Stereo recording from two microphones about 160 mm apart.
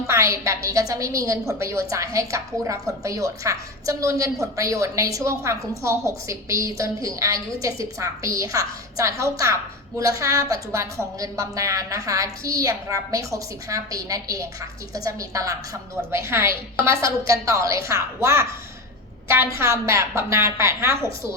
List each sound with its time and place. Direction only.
0.1 s a woman's voice: 20° right (ahead or behind)